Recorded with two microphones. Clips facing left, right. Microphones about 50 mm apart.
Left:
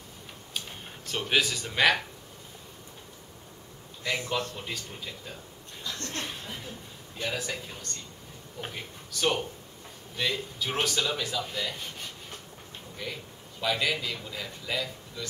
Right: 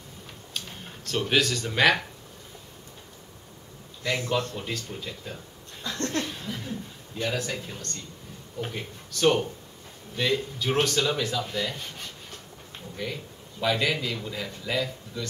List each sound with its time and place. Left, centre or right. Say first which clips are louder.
0.5 s a sound: even; centre
1.2 s a man's voice: right 2 dB; centre
4.0 s a man's voice: right 3 dB; centre
5.9 s laughter: right 7 dB; right
6.2 s laughter: right 3 dB; centre
7.2 s a man's voice: right 3 dB; centre
12.9 s a man's voice: right 4 dB; centre